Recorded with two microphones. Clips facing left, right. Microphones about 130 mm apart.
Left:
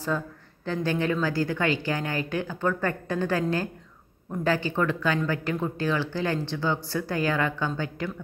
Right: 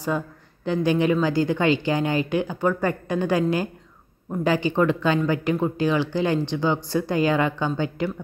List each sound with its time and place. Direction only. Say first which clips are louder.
0.7 s speech: right 6 dB; 15° right (ahead or behind)